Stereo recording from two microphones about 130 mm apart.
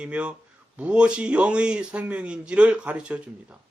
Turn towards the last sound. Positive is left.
turn(degrees=-10)  # may be behind; listen again after turning